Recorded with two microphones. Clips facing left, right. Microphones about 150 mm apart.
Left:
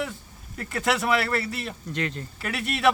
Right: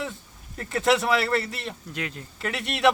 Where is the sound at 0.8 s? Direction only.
Centre (ahead or behind).